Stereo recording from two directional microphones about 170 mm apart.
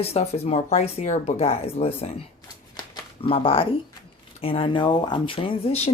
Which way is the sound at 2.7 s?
30° left (ahead or behind).